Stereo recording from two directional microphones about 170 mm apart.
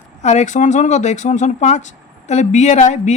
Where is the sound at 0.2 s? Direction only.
40° left (ahead or behind).